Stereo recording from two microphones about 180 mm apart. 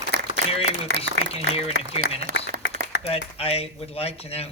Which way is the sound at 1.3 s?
35° left (ahead or behind).